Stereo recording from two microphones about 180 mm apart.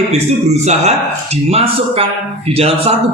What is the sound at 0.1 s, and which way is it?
A man's voice, 35° right (ahead or behind).